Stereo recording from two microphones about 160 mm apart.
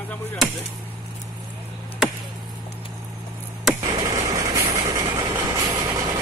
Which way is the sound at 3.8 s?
20° right (ahead or behind).